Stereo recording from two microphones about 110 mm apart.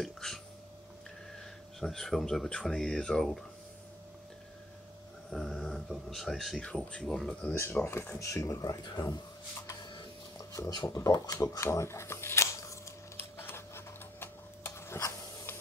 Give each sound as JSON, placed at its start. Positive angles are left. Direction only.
{"t": 0.0, "sound": "speech", "side_deg": 0}
{"t": 1.8, "sound": "speech", "side_deg": 5}
{"t": 5.3, "sound": "speech", "side_deg": 5}
{"t": 7.5, "sound": "speech", "side_deg": 20}
{"t": 10.7, "sound": "speech", "side_deg": 35}
{"t": 13.4, "sound": "tick-tock", "side_deg": 20}
{"t": 15.0, "sound": "a sound", "side_deg": 30}